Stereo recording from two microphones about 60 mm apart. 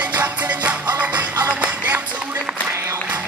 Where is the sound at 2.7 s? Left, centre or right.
Right.